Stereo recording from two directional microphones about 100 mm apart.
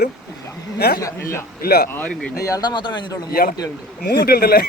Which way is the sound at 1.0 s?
30° left (ahead or behind).